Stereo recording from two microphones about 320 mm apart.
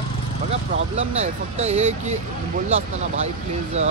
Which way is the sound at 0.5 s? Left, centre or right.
Centre.